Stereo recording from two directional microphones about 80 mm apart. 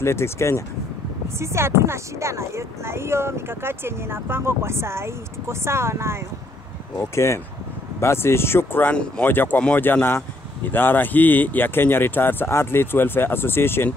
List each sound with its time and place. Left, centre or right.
0.0 s speech: left
1.4 s speech: right
7.0 s speech: left
8.9 s speech: centre
9.3 s speech: left